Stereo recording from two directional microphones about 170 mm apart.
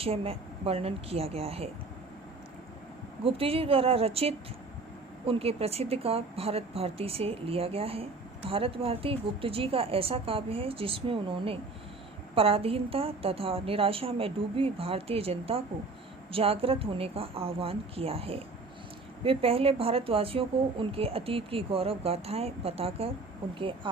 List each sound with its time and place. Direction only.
0.0 s a woman's voice: 35° right (ahead or behind)
3.2 s a woman's voice: 35° right (ahead or behind)